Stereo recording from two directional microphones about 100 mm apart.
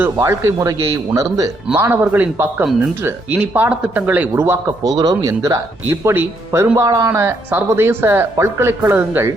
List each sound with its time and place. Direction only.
0.2 s speech: 35° right (ahead or behind)
4.8 s speech: 40° right (ahead or behind); by 9.3 s 20° right (ahead or behind)